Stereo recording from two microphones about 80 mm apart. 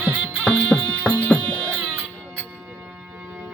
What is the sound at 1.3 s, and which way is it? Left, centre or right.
Music, left.